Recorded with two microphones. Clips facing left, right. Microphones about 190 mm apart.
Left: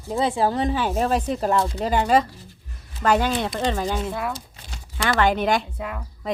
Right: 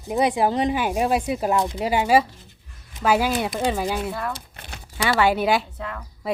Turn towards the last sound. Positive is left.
turn(degrees=-10)  # may be behind; listen again after turning